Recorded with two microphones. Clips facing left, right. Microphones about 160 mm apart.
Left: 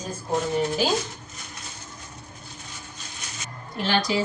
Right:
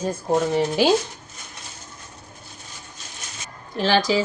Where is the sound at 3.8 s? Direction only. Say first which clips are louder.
Right 5 dB; 90° right.